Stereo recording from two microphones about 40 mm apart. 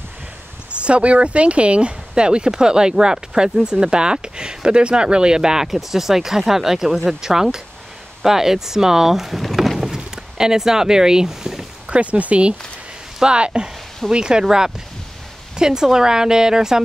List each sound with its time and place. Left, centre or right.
0.7 s speech: right; by 9.4 s centre
9.6 s a sound: centre
11.9 s speech: right; by 16.8 s centre